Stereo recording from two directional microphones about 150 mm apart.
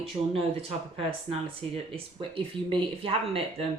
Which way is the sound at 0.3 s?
40° right (ahead or behind).